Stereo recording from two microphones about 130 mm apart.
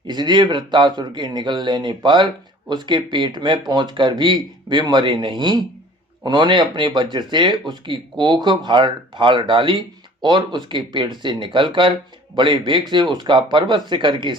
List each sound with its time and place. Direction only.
0.1 s speech: 35° right (ahead or behind)